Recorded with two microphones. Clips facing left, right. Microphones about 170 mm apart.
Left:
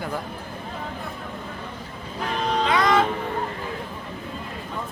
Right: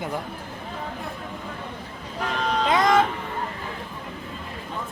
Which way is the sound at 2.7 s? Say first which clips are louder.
Right 2 dB; 45° right (ahead or behind).